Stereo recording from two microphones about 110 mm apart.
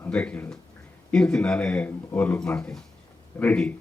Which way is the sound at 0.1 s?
10° left (ahead or behind).